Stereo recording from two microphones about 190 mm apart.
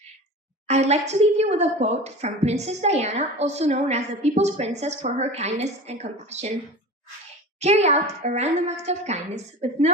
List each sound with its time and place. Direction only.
0.7 s a woman's voice: 35° right (ahead or behind)
7.6 s a woman's voice: 35° right (ahead or behind)